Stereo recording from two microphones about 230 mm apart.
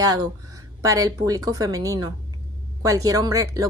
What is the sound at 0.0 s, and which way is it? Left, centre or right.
A woman's voice, centre.